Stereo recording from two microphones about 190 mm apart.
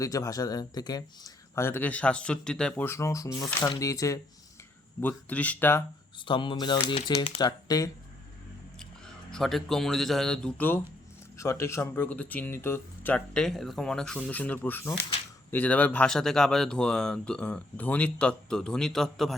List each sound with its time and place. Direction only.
0.0 s speech: 15° left (ahead or behind)
6.2 s speech: 25° left (ahead or behind)
9.3 s speech: centre (ahead or behind)